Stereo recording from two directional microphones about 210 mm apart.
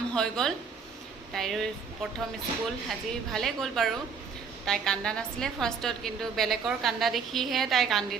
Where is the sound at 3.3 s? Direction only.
Centre (ahead or behind).